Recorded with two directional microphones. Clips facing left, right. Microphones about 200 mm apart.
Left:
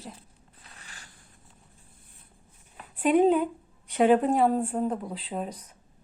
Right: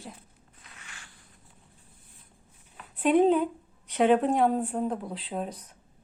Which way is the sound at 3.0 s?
5° left (ahead or behind).